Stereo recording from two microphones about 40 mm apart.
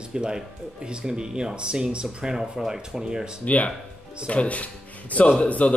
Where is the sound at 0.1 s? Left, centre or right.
Centre.